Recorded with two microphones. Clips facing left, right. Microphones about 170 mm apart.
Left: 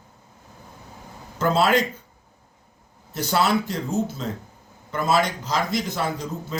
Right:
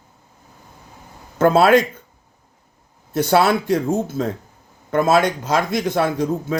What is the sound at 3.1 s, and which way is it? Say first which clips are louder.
Speech: right 6 dB; 55° right (ahead or behind).